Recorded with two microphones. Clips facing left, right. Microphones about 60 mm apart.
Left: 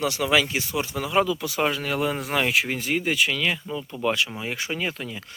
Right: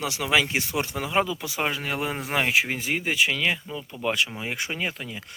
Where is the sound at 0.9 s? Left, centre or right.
Centre.